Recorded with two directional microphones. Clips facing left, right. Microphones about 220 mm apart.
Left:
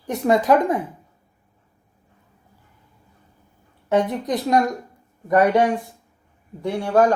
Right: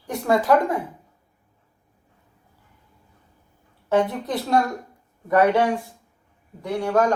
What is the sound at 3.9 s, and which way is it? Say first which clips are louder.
A woman's voice: left 1 dB; 15° left (ahead or behind).